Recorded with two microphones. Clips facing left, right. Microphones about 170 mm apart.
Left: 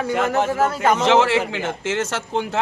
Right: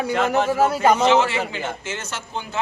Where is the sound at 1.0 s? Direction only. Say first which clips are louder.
Left 2 dB; 85° left.